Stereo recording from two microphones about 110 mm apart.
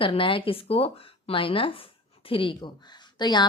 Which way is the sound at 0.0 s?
55° left (ahead or behind).